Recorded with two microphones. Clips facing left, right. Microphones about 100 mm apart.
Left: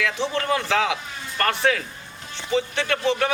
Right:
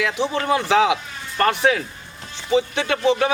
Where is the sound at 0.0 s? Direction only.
15° right (ahead or behind).